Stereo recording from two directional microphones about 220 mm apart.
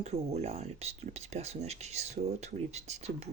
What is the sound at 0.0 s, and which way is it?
Speech, 30° right (ahead or behind).